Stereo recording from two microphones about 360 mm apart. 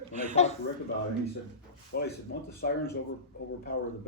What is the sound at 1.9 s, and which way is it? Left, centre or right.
Speech, left.